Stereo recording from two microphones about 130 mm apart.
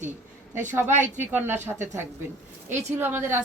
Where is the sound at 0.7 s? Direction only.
15° right (ahead or behind).